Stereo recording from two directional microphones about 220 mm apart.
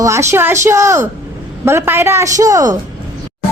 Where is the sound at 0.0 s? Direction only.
10° right (ahead or behind).